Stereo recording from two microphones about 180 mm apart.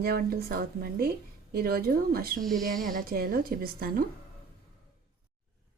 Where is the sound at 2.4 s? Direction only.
Centre (ahead or behind).